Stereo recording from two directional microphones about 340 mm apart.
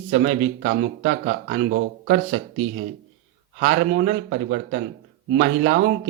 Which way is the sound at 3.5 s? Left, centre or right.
Right.